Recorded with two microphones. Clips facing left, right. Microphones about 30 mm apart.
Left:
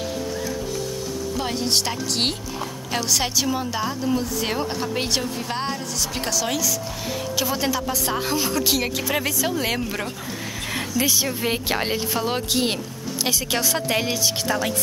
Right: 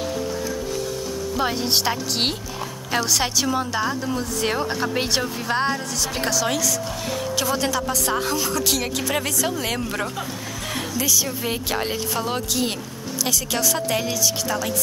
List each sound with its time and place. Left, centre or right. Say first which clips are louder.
1.4 s a woman's voice: right 2 dB; centre
11.0 s a woman's voice: left 1 dB; left
11.2 s speech: left 2 dB; centre
12.4 s a woman's voice: left 2 dB; left